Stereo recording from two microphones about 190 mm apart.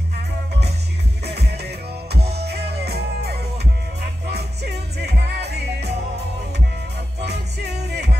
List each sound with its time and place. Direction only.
1.2 s music: 60° right (ahead or behind)
7.2 s music: 60° right (ahead or behind)